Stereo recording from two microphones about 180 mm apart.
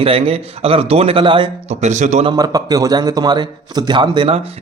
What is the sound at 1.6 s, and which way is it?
Speech, 40° right (ahead or behind).